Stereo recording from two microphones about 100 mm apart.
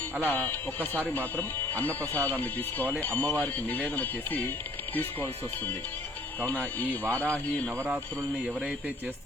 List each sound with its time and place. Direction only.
0.2 s speech: 20° left (ahead or behind)